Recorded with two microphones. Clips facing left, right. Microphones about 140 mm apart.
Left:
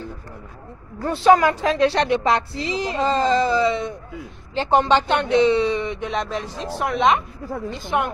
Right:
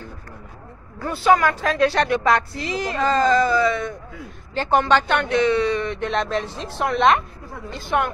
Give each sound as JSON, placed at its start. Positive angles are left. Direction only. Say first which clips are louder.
{"t": 1.0, "sound": "a woman's voice", "louder": "left 3 dB", "side_deg": 25}
{"t": 7.8, "sound": "speech", "louder": "right 2 dB", "side_deg": 15}